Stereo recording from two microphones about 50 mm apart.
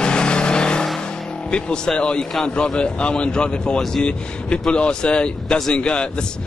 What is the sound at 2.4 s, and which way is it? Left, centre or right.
A man's voice, centre.